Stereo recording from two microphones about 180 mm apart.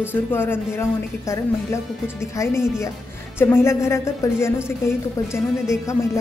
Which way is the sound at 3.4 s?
15° left (ahead or behind).